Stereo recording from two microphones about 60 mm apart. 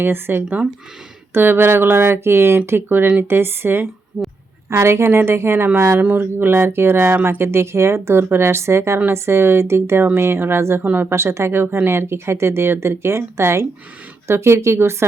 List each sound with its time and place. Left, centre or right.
0.0 s speech: right
4.1 s a sound: right
4.7 s speech: right
6.0 s speech: right
10.8 s speech: right
11.1 s speech: right